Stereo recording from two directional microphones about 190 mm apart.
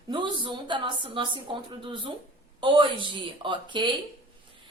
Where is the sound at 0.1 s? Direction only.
25° right (ahead or behind).